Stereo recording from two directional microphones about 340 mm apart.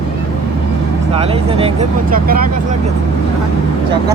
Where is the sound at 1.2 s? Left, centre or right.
Centre.